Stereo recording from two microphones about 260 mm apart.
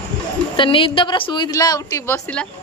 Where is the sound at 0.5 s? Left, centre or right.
Centre.